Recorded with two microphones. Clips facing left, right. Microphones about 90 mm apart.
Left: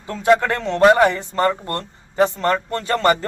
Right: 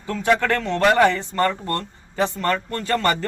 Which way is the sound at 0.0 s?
20° left (ahead or behind).